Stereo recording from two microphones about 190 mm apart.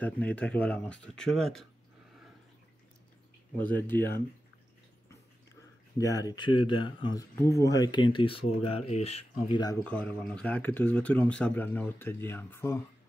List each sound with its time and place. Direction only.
0.0 s speech: 10° left (ahead or behind)
3.5 s speech: 10° left (ahead or behind)
5.9 s speech: 20° left (ahead or behind); by 9.6 s 35° left (ahead or behind)
9.8 s speech: 5° left (ahead or behind)